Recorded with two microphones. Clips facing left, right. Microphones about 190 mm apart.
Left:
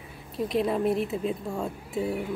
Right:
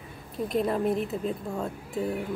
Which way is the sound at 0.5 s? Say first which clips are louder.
Left 1 dB; centre (ahead or behind).